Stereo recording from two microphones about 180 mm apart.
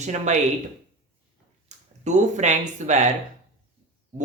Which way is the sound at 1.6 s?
40° right (ahead or behind).